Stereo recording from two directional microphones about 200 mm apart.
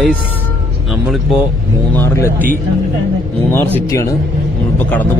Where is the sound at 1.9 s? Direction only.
10° left (ahead or behind).